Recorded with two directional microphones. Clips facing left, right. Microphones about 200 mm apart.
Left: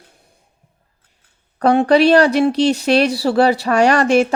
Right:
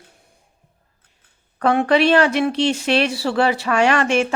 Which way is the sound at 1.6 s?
35° left (ahead or behind).